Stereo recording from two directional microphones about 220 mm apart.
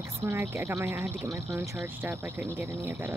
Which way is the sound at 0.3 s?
10° right (ahead or behind).